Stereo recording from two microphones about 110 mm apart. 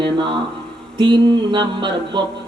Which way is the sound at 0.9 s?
45° right (ahead or behind).